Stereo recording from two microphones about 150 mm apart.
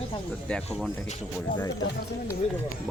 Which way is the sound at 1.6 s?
25° left (ahead or behind).